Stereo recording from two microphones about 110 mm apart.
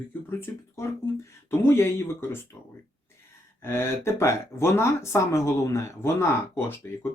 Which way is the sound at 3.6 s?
25° left (ahead or behind).